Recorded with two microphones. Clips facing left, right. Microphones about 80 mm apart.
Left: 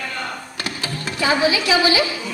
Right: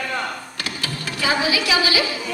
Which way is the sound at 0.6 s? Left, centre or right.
Left.